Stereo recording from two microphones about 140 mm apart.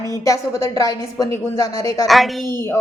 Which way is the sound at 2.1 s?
Centre (ahead or behind).